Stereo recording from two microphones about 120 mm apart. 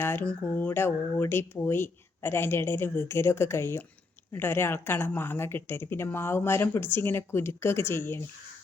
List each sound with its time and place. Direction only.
0.0 s speech: 15° left (ahead or behind)